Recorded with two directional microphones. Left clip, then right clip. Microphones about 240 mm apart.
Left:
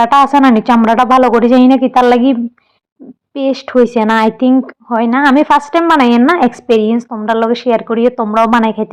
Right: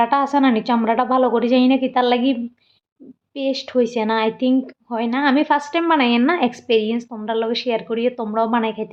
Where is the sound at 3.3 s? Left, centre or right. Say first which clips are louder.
Left 8 dB; left.